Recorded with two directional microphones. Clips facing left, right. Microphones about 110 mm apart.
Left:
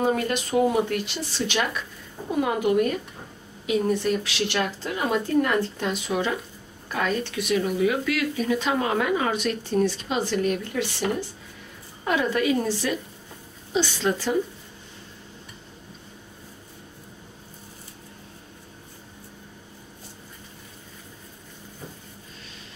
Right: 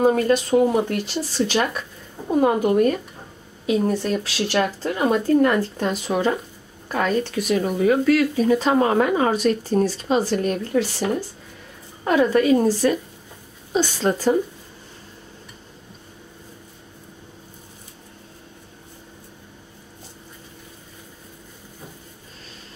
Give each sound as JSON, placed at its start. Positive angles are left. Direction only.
{"t": 0.0, "sound": "a woman's voice", "side_deg": -40}